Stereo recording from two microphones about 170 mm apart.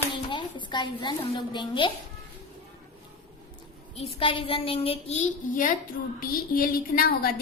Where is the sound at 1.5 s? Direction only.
30° left (ahead or behind).